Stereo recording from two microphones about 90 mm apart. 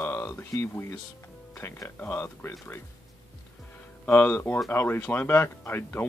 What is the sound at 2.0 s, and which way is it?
Speech, 20° left (ahead or behind).